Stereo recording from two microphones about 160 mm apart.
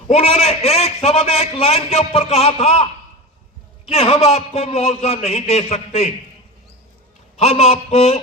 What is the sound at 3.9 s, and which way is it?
A man's voice, 40° left (ahead or behind).